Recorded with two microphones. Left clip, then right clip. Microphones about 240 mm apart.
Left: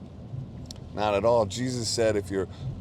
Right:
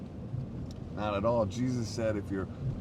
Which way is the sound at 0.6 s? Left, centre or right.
Left.